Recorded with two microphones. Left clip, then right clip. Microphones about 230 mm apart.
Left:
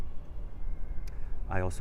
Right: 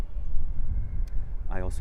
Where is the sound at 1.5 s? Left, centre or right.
Centre.